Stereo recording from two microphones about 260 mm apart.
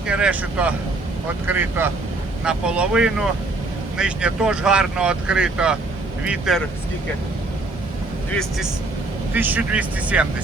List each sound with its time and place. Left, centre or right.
0.1 s speech: centre
8.3 s speech: centre